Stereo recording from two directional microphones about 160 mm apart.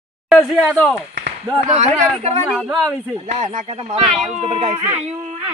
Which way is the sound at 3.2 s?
45° right (ahead or behind).